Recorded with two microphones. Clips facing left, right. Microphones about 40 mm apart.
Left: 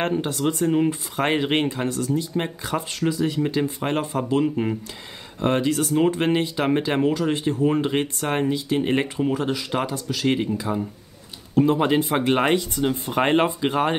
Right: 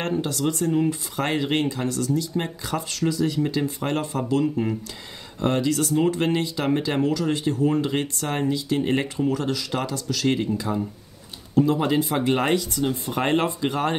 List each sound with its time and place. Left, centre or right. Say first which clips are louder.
0.0 s speech: left 2 dB; left
11.5 s speech: left 2 dB; left